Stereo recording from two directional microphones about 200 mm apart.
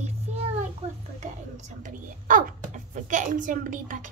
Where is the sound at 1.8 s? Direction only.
40° right (ahead or behind).